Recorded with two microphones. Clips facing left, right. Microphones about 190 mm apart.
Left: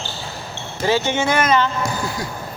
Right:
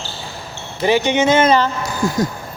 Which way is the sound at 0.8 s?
15° right (ahead or behind).